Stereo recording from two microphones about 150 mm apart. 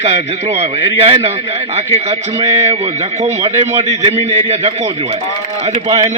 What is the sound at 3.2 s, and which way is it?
A man's voice, 50° right (ahead or behind).